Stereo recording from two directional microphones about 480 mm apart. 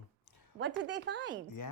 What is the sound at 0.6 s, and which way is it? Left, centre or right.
Speech, right.